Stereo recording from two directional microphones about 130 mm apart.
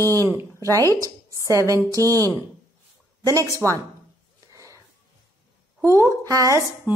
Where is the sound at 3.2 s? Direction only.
25° right (ahead or behind).